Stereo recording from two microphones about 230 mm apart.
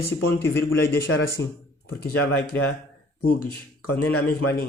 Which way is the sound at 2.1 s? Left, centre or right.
Left.